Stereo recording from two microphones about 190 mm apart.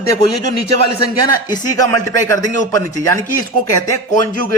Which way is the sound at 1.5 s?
20° left (ahead or behind).